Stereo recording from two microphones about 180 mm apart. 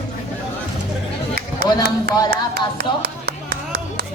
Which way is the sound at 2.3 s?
60° right (ahead or behind).